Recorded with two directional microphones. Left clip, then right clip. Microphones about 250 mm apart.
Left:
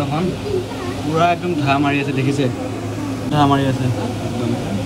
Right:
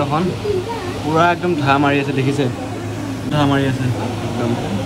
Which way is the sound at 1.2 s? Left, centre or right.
Centre.